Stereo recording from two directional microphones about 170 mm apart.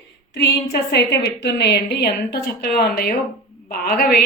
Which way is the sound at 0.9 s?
85° left.